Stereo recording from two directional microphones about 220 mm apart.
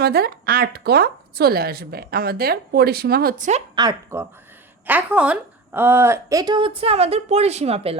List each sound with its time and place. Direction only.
0.0 s speech: 45° right (ahead or behind)
3.8 s a woman's voice: 15° right (ahead or behind)